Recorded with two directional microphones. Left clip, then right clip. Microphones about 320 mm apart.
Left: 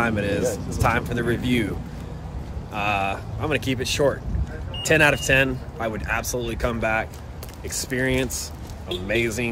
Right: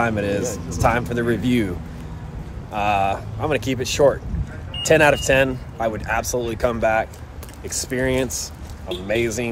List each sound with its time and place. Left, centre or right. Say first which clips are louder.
0.0 s speech: right 1 dB; centre
2.7 s speech: right 4 dB; centre